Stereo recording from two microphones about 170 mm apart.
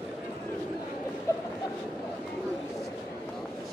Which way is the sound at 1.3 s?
15° left (ahead or behind).